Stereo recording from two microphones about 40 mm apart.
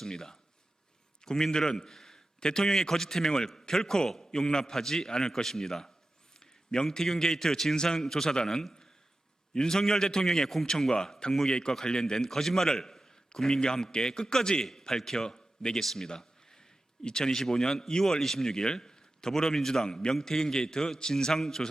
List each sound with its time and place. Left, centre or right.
0.0 s a man's voice: centre
15.8 s speech: centre
16.0 s a sound: centre
17.0 s speech: centre